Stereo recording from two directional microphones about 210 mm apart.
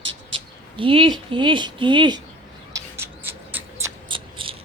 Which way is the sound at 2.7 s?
10° right (ahead or behind).